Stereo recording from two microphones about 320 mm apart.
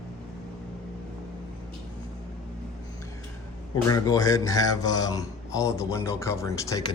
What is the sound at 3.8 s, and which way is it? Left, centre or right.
Speech, centre.